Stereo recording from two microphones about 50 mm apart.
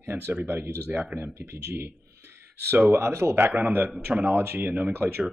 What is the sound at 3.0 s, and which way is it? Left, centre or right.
Speech, right.